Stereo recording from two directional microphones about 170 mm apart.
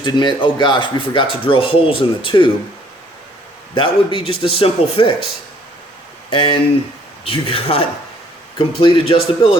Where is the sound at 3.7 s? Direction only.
30° left (ahead or behind).